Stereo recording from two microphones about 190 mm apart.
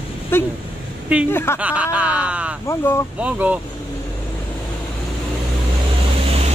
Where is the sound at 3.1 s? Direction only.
5° right (ahead or behind).